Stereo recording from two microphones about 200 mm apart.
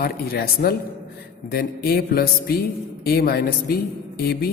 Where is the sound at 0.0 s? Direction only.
50° left (ahead or behind).